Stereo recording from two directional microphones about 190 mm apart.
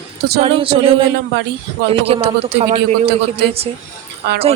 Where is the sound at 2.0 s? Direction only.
30° right (ahead or behind).